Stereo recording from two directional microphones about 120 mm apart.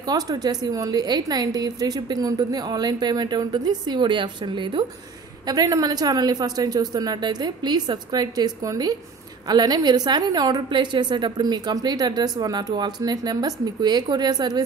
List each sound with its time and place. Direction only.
0.0 s a woman's voice: 35° right (ahead or behind)